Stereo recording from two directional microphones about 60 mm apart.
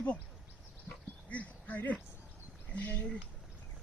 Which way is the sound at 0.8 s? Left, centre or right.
Left.